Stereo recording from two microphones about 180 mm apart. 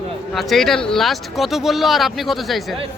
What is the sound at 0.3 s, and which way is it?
Speech, centre (ahead or behind).